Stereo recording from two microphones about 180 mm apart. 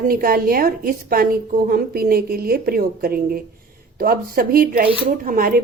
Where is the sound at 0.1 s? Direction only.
55° right (ahead or behind).